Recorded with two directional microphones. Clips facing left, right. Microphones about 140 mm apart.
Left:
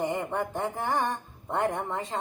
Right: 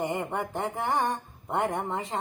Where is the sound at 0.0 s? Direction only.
15° right (ahead or behind).